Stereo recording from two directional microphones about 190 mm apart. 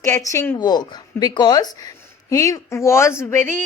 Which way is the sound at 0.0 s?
15° left (ahead or behind).